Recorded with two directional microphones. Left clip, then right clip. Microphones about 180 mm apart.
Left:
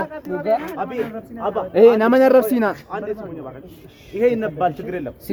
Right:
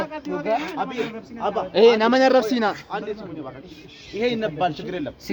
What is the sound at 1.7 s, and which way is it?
Speech, 30° left (ahead or behind).